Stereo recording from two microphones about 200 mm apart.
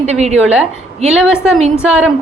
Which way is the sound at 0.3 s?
5° right (ahead or behind).